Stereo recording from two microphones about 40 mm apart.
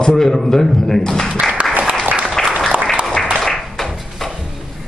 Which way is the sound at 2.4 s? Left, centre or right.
Centre.